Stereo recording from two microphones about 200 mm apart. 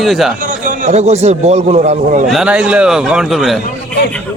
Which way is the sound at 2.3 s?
5° right (ahead or behind).